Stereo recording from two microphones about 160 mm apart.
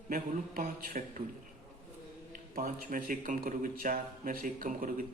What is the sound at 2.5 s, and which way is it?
A man's voice, 60° right (ahead or behind).